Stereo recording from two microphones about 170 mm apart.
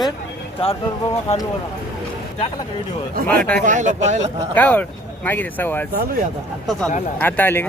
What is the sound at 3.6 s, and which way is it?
Speech, 45° right (ahead or behind).